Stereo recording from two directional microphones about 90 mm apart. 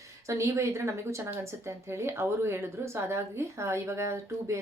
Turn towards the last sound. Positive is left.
turn(degrees=-30)  # may be behind; listen again after turning